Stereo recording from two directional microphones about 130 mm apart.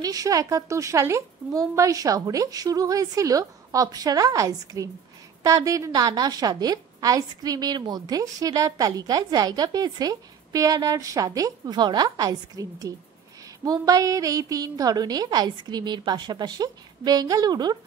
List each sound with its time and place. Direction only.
0.0 s a woman's voice: 30° right (ahead or behind)